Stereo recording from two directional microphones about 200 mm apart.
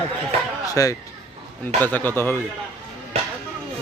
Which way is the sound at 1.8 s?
10° left (ahead or behind).